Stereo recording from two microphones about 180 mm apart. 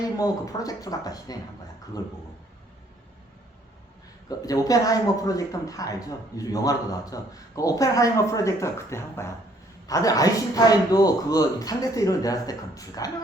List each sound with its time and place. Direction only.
0.0 s speech: 20° left (ahead or behind)
4.3 s speech: 20° left (ahead or behind)